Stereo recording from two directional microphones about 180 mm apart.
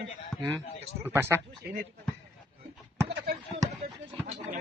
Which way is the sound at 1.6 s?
60° right (ahead or behind).